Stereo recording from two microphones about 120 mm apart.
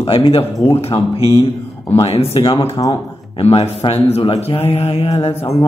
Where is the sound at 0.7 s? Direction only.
55° left (ahead or behind).